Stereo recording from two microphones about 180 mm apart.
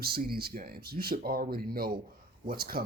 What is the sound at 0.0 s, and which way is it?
Speech, 60° right (ahead or behind).